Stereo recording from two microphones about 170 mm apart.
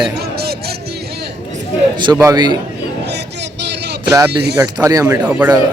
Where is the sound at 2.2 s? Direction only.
20° right (ahead or behind).